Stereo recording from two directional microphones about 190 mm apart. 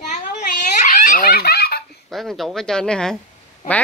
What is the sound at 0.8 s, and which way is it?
Baby laughter, 45° left (ahead or behind).